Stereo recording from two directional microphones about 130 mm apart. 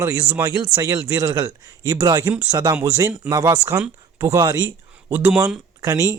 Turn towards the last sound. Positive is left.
turn(degrees=-30)  # may be behind; listen again after turning